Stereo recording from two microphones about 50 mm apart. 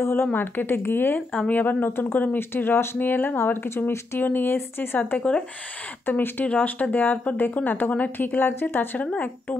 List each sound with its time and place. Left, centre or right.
0.0 s speech: left
4.2 s speech: left
6.4 s speech: left
9.0 s speech: left